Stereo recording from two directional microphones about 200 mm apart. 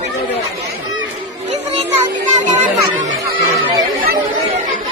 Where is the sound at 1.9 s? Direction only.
35° right (ahead or behind).